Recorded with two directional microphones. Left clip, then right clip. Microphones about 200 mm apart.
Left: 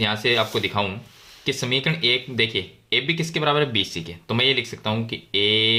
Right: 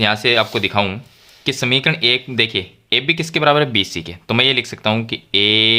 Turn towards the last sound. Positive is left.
turn(degrees=-35)  # may be behind; listen again after turning